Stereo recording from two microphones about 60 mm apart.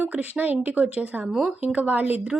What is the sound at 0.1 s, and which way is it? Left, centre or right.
A woman's voice, right.